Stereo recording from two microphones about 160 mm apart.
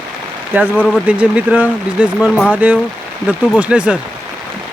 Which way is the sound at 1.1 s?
10° right (ahead or behind).